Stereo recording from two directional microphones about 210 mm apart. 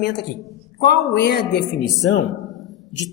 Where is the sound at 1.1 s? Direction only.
50° left (ahead or behind).